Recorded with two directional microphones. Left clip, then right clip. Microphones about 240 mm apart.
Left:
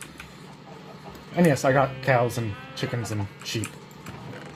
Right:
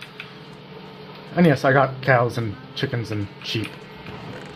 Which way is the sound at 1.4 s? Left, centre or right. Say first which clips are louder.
Right 3 dB; centre.